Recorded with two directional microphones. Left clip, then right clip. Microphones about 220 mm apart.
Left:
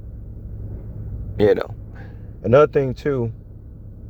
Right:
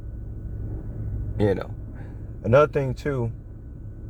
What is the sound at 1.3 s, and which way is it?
A man's voice, 40° left (ahead or behind).